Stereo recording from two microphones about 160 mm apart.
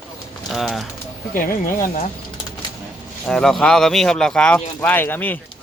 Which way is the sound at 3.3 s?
5° left (ahead or behind).